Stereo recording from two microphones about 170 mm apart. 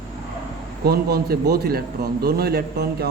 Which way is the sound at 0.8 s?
65° right (ahead or behind).